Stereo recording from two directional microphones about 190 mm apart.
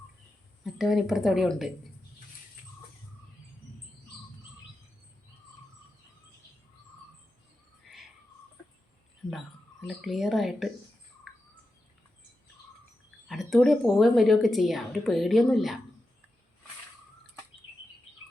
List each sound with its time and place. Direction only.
0.6 s speech: centre (ahead or behind)
9.2 s a sound: 5° left (ahead or behind)
9.8 s speech: centre (ahead or behind)
11.3 s bird: centre (ahead or behind)
13.2 s speech: centre (ahead or behind)